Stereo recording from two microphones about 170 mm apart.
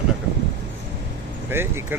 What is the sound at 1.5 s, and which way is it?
Speech, 15° right (ahead or behind).